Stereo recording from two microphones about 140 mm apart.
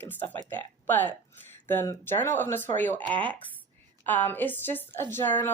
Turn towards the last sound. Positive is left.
turn(degrees=15)  # may be behind; listen again after turning